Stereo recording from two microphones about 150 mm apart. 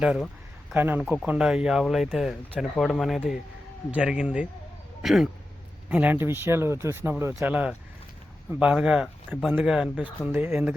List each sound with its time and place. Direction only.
0.0 s speech: 5° right (ahead or behind)